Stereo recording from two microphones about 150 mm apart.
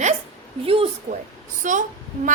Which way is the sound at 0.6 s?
40° right (ahead or behind).